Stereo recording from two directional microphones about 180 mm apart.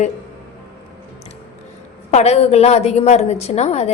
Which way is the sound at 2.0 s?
35° left (ahead or behind).